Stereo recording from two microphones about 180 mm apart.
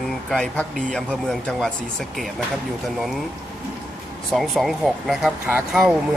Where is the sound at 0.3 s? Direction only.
5° left (ahead or behind).